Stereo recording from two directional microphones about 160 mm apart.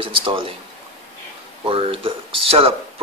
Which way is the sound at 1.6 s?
35° right (ahead or behind).